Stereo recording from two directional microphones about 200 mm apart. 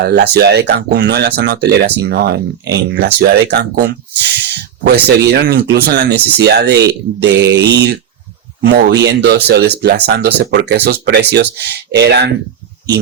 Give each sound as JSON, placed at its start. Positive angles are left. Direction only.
{"t": 0.0, "sound": "speech", "side_deg": -55}